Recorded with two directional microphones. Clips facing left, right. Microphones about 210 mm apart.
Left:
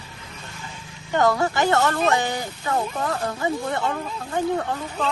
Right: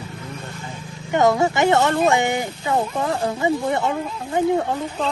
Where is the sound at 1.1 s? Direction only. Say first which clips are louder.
Right 3 dB; 20° right (ahead or behind).